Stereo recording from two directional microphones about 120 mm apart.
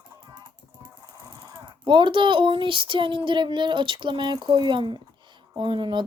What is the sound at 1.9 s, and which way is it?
Speech, 40° right (ahead or behind).